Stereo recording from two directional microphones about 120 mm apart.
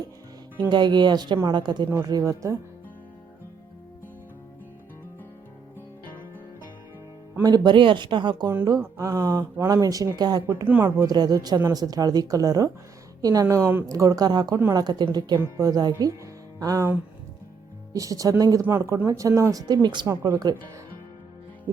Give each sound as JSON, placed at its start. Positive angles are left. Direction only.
{"t": 0.7, "sound": "speech", "side_deg": -40}
{"t": 7.4, "sound": "speech", "side_deg": -35}
{"t": 8.4, "sound": "speech", "side_deg": -25}
{"t": 10.7, "sound": "speech", "side_deg": -15}
{"t": 11.0, "sound": "speech", "side_deg": -35}
{"t": 17.9, "sound": "speech", "side_deg": -30}
{"t": 20.1, "sound": "speech", "side_deg": -25}